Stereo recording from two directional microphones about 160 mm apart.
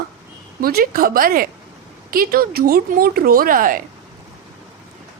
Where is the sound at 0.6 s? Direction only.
65° right (ahead or behind).